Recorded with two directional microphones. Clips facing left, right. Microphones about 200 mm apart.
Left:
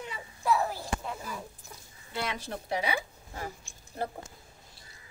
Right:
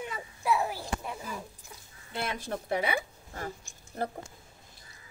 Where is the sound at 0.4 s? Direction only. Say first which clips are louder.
Left 1 dB; 10° right (ahead or behind).